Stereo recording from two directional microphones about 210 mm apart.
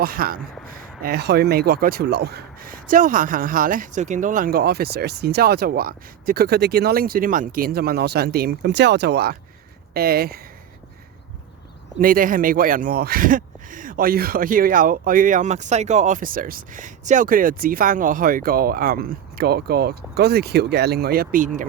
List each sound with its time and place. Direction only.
0.0 s speech: 45° right (ahead or behind)
11.9 s speech: 40° right (ahead or behind)